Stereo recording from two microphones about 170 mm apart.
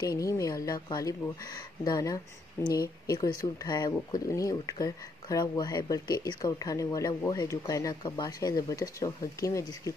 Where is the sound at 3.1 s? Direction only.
20° left (ahead or behind).